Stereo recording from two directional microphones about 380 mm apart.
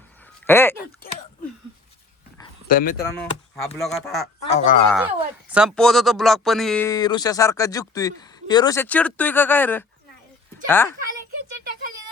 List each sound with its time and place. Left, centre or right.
0.4 s speech: centre
2.6 s speech: left
3.0 s speech: centre
4.4 s speech: centre
4.9 s speech: centre